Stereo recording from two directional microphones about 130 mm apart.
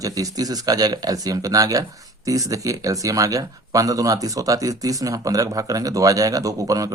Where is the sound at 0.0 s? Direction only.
25° right (ahead or behind).